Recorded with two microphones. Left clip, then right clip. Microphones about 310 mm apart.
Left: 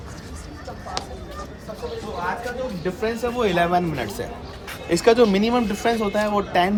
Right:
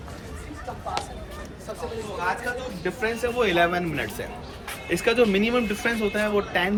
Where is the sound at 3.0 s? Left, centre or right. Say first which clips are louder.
Left 1 dB; centre.